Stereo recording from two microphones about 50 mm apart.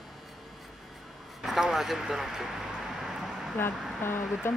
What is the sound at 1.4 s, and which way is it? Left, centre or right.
Speech, centre.